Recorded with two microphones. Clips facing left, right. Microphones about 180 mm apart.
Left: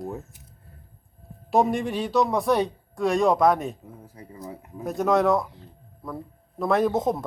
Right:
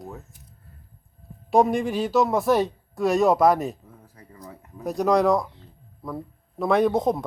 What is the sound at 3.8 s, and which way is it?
Speech, 20° left (ahead or behind).